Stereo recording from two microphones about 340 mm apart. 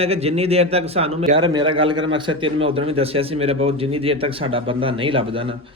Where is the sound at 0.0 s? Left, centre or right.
Centre.